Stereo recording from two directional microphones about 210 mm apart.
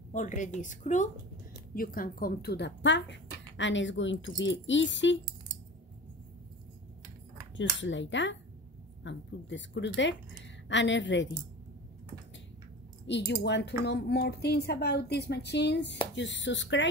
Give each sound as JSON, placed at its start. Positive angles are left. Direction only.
{"t": 0.1, "sound": "a woman's voice", "side_deg": 35}
{"t": 7.5, "sound": "speech", "side_deg": 60}
{"t": 13.0, "sound": "speech", "side_deg": 55}